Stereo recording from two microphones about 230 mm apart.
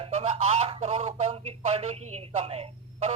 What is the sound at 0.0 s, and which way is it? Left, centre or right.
Radio, right.